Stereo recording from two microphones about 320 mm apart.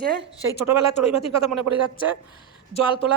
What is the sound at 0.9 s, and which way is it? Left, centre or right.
Speech, centre.